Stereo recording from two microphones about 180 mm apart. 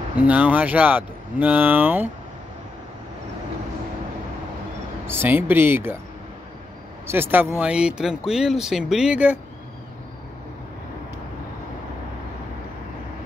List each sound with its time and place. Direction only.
0.2 s speech: 10° right (ahead or behind)
5.0 s speech: 10° right (ahead or behind)
7.1 s speech: 10° right (ahead or behind)